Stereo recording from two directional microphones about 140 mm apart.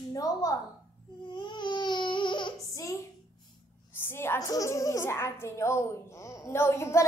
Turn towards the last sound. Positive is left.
turn(degrees=20)  # may be behind; listen again after turning